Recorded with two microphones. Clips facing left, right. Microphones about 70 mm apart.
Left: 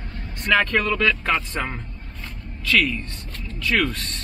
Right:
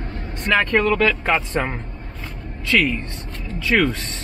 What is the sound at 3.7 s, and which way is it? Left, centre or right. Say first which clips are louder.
Speech: right 4 dB; right.